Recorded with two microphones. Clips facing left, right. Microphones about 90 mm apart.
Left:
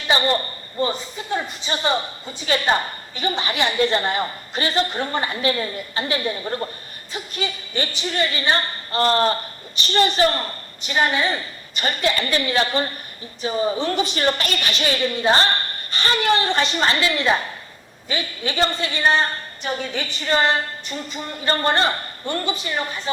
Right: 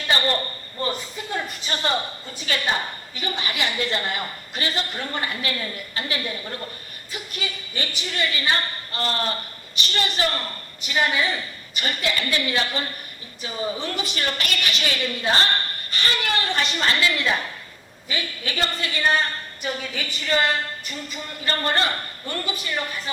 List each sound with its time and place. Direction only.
0.8 s a man's voice: 20° left (ahead or behind)
3.2 s a woman's voice: 30° left (ahead or behind)